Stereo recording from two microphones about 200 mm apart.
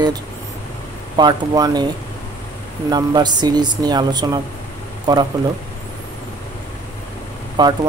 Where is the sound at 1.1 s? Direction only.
20° right (ahead or behind).